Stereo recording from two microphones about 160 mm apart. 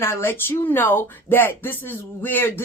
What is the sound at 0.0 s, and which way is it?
A woman's voice, 15° left (ahead or behind).